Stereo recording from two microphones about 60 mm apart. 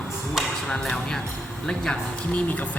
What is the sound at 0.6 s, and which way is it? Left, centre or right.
Speech, centre.